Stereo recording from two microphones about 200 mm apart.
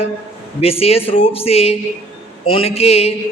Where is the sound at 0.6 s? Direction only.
30° left (ahead or behind).